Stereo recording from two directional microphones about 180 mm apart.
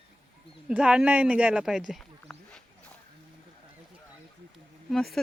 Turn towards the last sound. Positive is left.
turn(degrees=0)  # may be behind; listen again after turning